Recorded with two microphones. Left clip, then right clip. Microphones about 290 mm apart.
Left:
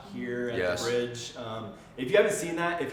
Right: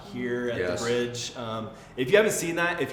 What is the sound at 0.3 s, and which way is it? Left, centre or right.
Speech, right.